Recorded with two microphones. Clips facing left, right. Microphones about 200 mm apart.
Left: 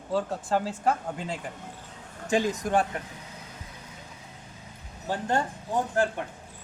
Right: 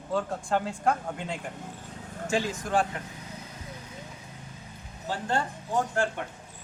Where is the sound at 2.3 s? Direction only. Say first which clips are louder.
Left 3 dB; 20° left (ahead or behind).